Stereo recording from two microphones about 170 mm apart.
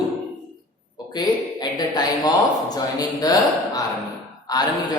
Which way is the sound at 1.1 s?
25° left (ahead or behind).